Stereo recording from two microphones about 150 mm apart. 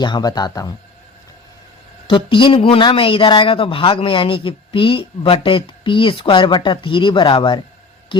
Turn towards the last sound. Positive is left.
turn(degrees=35)  # may be behind; listen again after turning